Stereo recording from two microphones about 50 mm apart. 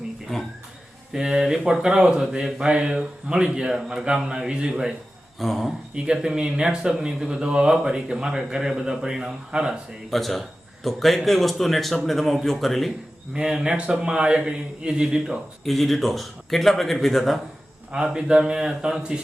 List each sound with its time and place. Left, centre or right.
0.3 s a man's voice: centre
1.1 s speech: centre
5.4 s a man's voice: centre
5.9 s speech: centre
10.1 s a man's voice: centre
13.3 s speech: centre
15.6 s a man's voice: centre
17.9 s speech: centre